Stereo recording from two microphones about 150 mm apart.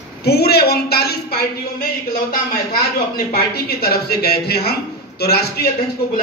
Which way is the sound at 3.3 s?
90° left.